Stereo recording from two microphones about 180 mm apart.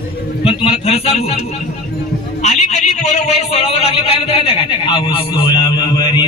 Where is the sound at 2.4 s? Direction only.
40° left (ahead or behind).